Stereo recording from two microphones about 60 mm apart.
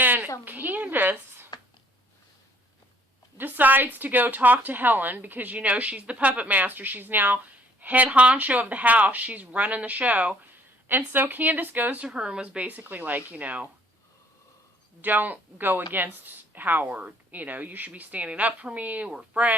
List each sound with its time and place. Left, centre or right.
0.0 s a sound: right
0.4 s a woman's voice: right
3.3 s speech: right
12.0 s speech: centre
15.0 s speech: right